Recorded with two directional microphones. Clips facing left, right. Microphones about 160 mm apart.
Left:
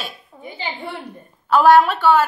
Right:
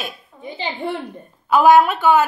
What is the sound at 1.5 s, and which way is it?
Speech, 10° right (ahead or behind).